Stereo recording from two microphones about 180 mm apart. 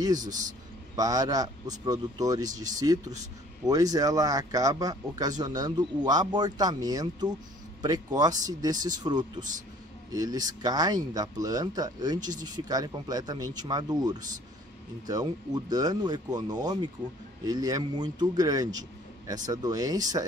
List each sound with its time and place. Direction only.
0.9 s a man's voice: 20° right (ahead or behind)